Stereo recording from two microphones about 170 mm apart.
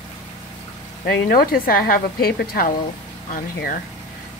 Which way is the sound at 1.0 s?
60° left (ahead or behind).